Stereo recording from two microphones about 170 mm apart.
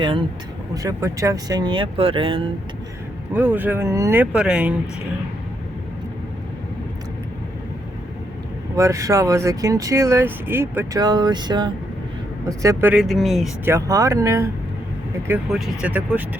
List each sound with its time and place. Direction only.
0.0 s speech: 30° right (ahead or behind)
3.3 s speech: 10° right (ahead or behind)
8.7 s speech: 20° right (ahead or behind)
12.9 s speech: centre (ahead or behind)
13.7 s speech: 20° right (ahead or behind)
15.4 s speech: 5° right (ahead or behind)